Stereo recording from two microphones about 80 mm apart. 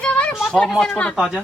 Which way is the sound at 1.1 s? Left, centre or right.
Centre.